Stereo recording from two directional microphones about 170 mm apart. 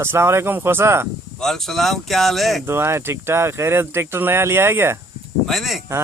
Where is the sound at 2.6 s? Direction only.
15° right (ahead or behind).